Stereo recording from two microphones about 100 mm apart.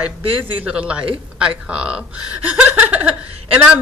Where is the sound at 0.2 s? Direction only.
60° right (ahead or behind).